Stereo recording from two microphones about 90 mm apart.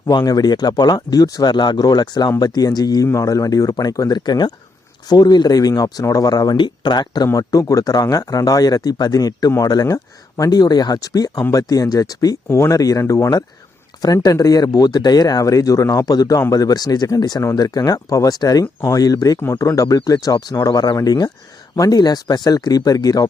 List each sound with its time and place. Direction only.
0.0 s speech: 45° left (ahead or behind)
6.6 s speech: 55° left (ahead or behind)
7.3 s speech: 40° left (ahead or behind)